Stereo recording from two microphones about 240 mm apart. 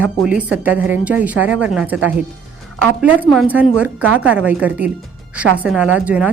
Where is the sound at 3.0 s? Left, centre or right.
Centre.